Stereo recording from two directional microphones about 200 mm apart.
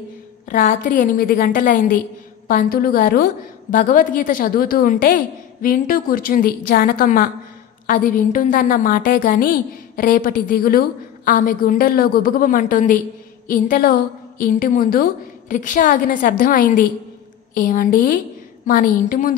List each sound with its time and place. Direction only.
0.5 s a woman's voice: 45° left (ahead or behind)